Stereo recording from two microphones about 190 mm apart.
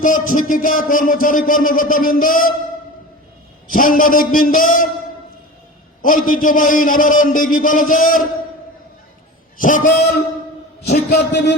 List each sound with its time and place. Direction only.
0.0 s music: 45° left (ahead or behind)
3.7 s music: 45° left (ahead or behind)
6.0 s music: 45° left (ahead or behind)
9.6 s music: 45° left (ahead or behind)
10.8 s a man's voice: 65° left (ahead or behind)